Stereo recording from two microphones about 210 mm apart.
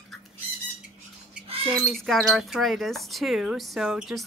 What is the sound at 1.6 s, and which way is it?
Speech, centre (ahead or behind).